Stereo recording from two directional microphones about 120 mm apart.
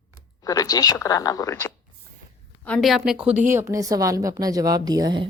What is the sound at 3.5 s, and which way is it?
A woman's voice, 20° right (ahead or behind).